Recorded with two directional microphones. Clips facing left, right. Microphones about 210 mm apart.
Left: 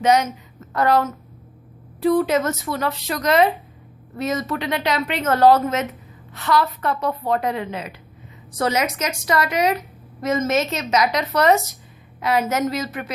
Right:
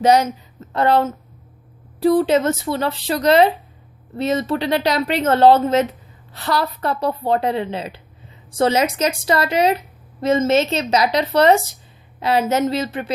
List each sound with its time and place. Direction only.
0.0 s a woman's voice: 35° right (ahead or behind)